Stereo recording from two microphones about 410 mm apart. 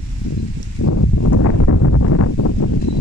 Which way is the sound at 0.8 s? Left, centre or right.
Left.